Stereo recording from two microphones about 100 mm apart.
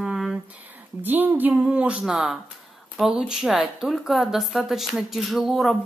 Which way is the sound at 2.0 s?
5° right (ahead or behind).